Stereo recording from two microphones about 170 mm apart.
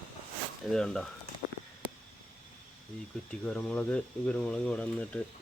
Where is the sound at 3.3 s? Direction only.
5° left (ahead or behind).